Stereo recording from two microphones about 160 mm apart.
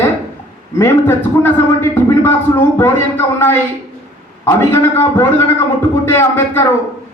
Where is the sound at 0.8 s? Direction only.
15° left (ahead or behind).